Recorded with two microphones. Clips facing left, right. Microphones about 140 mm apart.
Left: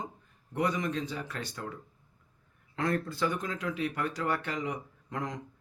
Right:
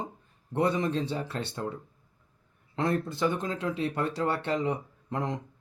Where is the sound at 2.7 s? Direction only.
25° right (ahead or behind).